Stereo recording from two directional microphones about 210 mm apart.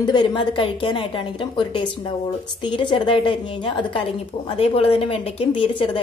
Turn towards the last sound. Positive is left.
turn(degrees=25)  # may be behind; listen again after turning